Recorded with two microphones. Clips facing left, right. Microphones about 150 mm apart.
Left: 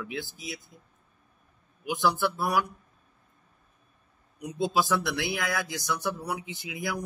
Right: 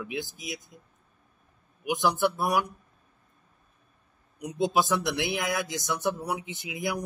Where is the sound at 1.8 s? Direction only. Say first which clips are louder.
Right 1 dB; 15° right (ahead or behind).